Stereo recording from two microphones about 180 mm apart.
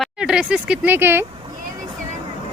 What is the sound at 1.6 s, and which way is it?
Vehicle, 50° right (ahead or behind).